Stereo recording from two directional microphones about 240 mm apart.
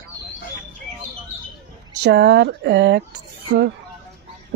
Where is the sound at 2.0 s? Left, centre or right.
Right.